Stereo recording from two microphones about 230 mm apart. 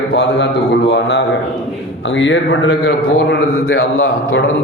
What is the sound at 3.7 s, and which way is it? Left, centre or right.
Mantra, left.